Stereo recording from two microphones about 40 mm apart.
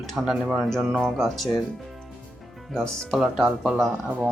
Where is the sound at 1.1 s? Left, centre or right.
Centre.